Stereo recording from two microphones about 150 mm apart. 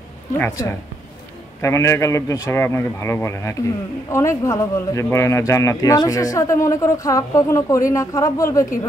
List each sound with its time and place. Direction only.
0.4 s speech: 20° left (ahead or behind)